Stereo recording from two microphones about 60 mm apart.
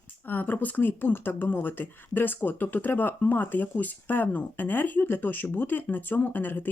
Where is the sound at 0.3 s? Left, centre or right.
Left.